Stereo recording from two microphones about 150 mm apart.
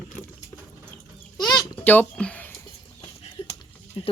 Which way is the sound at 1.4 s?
25° left (ahead or behind).